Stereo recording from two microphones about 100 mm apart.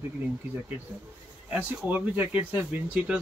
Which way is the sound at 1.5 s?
15° right (ahead or behind).